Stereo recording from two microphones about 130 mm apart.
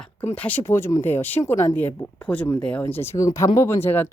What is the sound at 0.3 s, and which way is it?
A woman's voice, 10° left (ahead or behind).